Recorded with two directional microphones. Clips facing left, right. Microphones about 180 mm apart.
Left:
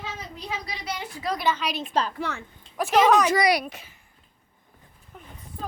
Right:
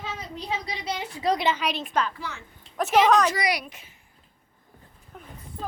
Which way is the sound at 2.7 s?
Centre (ahead or behind).